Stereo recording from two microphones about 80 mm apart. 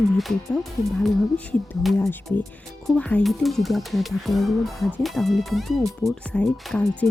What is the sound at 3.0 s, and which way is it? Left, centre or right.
Speech, centre.